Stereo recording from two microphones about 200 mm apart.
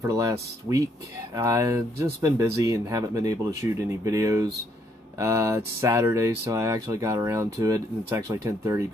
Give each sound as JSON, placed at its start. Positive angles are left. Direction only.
{"t": 0.0, "sound": "speech", "side_deg": -15}